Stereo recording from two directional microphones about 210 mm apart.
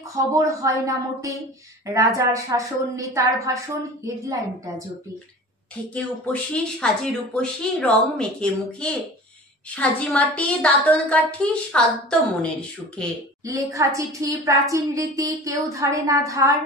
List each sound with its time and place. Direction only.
0.3 s a woman's voice: 15° right (ahead or behind)
5.9 s speech: 5° left (ahead or behind)
13.5 s a woman's voice: 15° right (ahead or behind)